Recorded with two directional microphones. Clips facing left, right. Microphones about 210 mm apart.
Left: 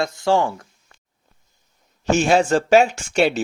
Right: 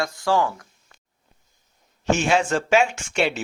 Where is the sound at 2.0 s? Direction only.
40° left (ahead or behind).